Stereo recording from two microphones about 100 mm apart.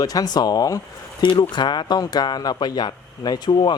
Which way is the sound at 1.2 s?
50° left (ahead or behind).